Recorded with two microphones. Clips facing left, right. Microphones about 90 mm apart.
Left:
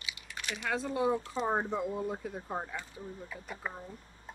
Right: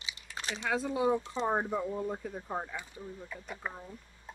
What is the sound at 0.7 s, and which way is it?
Speech, centre (ahead or behind).